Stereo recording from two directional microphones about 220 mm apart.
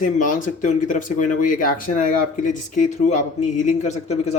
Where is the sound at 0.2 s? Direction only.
35° left (ahead or behind).